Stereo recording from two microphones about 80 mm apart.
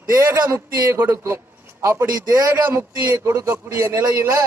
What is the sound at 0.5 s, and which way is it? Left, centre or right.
A man's voice, right.